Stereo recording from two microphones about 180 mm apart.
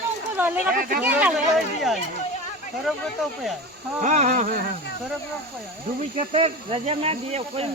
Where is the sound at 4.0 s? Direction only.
40° right (ahead or behind).